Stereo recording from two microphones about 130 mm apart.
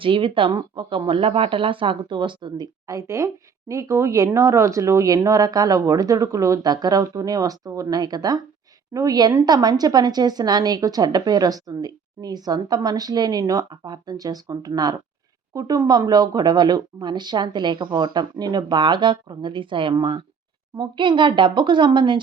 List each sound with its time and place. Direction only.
0.0 s a woman's voice: 40° right (ahead or behind)